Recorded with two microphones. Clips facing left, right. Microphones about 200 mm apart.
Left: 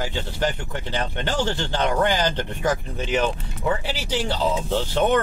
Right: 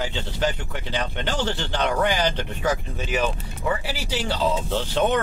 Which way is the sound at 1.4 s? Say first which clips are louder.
Left 3 dB; 15° left (ahead or behind).